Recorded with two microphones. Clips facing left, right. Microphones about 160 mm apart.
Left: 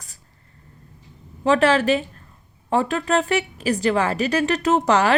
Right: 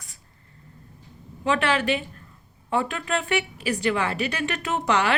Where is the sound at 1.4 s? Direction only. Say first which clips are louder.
Left 6 dB; 40° left (ahead or behind).